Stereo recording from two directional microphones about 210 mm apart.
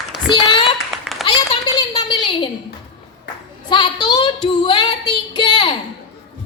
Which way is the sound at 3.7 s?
20° left (ahead or behind).